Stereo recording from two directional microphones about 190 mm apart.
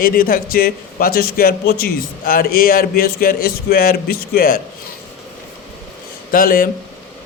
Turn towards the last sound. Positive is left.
turn(degrees=50)  # may be behind; listen again after turning